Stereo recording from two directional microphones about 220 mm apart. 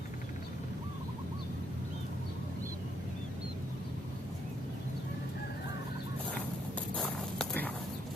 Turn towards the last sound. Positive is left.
turn(degrees=5)  # may be behind; listen again after turning